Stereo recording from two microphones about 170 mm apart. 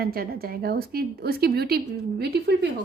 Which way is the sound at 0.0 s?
65° right (ahead or behind).